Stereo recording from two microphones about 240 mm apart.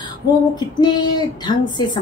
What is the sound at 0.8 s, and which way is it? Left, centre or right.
A woman's voice, centre.